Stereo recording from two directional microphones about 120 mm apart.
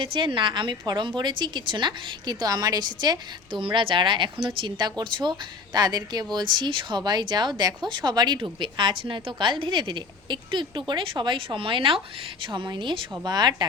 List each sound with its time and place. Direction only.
0.0 s speech: 45° right (ahead or behind)